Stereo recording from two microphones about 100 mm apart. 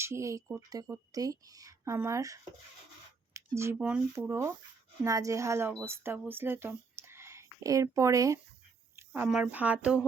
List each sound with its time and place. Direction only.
0.0 s speech: 30° right (ahead or behind)
3.3 s a sound: 30° right (ahead or behind)
3.8 s speech: 10° right (ahead or behind)
4.1 s speech: 25° right (ahead or behind)
9.0 s speech: 15° right (ahead or behind)